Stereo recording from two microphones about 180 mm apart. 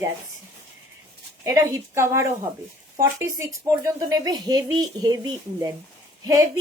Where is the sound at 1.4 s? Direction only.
20° right (ahead or behind).